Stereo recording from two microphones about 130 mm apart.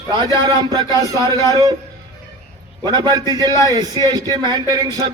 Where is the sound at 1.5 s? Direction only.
30° right (ahead or behind).